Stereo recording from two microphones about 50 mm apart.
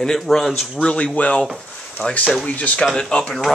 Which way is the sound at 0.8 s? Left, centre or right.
Left.